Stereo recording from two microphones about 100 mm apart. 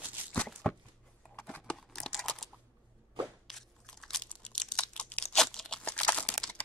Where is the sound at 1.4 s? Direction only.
20° left (ahead or behind).